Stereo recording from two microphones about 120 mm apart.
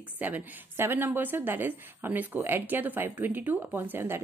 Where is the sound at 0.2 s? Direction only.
15° right (ahead or behind).